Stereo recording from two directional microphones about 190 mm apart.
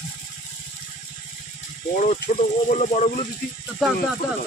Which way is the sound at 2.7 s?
40° left (ahead or behind).